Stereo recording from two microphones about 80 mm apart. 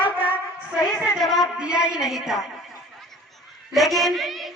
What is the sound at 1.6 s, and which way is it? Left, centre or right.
Speech, centre.